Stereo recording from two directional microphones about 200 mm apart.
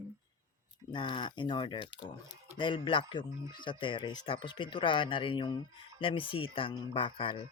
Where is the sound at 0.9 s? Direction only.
25° left (ahead or behind).